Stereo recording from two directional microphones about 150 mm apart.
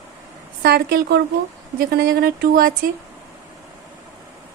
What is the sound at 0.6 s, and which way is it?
A woman's voice, 90° right.